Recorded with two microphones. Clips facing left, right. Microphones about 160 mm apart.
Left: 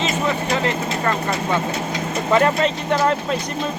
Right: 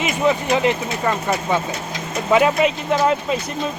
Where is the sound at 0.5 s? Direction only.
15° right (ahead or behind).